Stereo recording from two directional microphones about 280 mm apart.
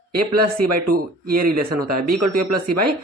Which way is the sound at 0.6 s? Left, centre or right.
Right.